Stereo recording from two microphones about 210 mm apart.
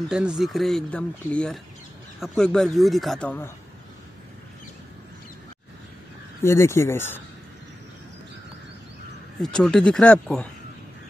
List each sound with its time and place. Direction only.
0.1 s speech: 5° right (ahead or behind)
6.4 s speech: 15° left (ahead or behind)
9.4 s speech: 5° left (ahead or behind)